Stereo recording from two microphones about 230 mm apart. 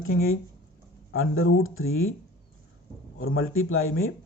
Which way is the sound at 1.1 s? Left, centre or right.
Left.